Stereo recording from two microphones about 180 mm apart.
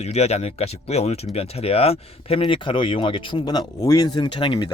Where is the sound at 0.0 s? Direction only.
35° left (ahead or behind).